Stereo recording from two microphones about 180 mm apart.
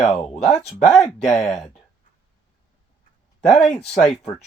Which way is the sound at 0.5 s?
40° left (ahead or behind).